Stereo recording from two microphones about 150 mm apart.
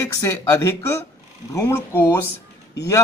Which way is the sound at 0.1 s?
20° left (ahead or behind).